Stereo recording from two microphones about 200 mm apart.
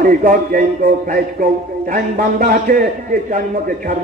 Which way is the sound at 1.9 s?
45° right (ahead or behind).